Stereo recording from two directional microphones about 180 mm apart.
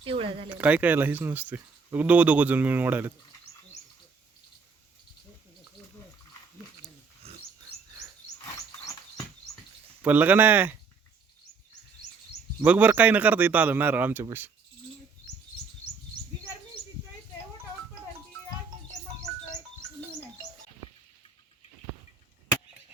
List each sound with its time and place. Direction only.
0.0 s speech: 30° right (ahead or behind)
0.6 s speech: 10° right (ahead or behind)
7.2 s pig: 35° right (ahead or behind)
10.0 s speech: 10° right (ahead or behind)
12.6 s speech: 10° right (ahead or behind)